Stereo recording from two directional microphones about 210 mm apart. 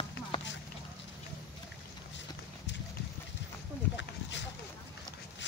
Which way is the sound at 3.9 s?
60° left (ahead or behind).